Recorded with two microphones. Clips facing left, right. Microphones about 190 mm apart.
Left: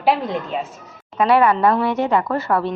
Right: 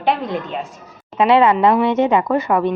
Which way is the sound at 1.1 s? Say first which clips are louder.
Right 2 dB; 25° right (ahead or behind).